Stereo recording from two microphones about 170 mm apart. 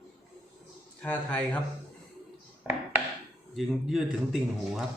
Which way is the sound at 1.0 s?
10° left (ahead or behind).